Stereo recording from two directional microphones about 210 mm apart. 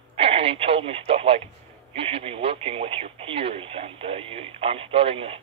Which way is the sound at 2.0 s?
25° right (ahead or behind).